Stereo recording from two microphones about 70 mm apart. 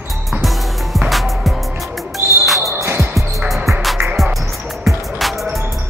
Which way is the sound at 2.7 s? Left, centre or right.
Right.